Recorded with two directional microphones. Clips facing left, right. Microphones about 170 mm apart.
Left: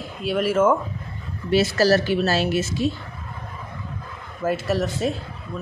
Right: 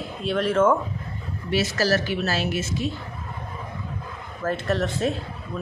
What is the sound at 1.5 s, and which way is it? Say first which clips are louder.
A woman's voice: left 5 dB; 35° left (ahead or behind).